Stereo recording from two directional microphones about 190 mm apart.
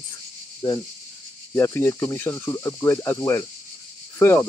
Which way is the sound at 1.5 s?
15° left (ahead or behind).